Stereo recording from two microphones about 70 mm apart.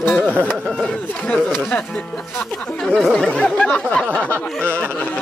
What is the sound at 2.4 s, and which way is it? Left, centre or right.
Speech, centre.